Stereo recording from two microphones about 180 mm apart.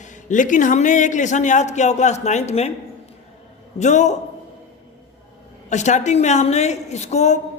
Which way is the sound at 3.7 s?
40° left (ahead or behind).